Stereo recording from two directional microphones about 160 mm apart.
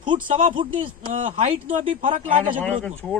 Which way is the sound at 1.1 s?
45° right (ahead or behind).